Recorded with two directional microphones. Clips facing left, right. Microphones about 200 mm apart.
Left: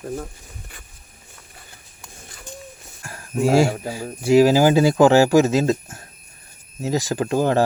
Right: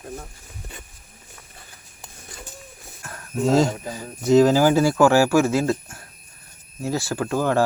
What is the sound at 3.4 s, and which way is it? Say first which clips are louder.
Speech: left 2 dB; 10° left (ahead or behind).